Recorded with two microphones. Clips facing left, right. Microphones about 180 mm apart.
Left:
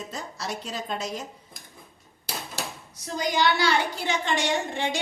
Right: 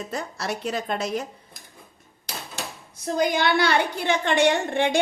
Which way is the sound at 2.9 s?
55° right (ahead or behind).